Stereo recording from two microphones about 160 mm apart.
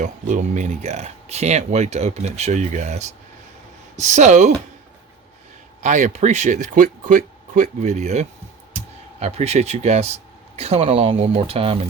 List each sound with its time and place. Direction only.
0.0 s speech: 50° right (ahead or behind)
5.8 s speech: 50° right (ahead or behind); by 11.8 s 35° right (ahead or behind)